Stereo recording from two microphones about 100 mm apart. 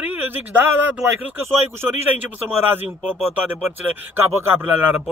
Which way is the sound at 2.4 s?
20° right (ahead or behind).